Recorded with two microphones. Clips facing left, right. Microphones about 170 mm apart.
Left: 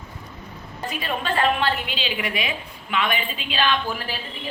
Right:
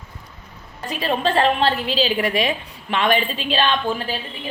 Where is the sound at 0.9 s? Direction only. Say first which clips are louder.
Right 5 dB; 35° right (ahead or behind).